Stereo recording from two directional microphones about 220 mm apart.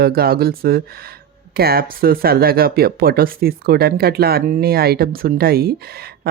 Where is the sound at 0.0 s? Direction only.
45° right (ahead or behind).